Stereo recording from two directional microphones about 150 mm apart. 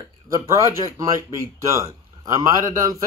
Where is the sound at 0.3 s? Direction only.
20° right (ahead or behind).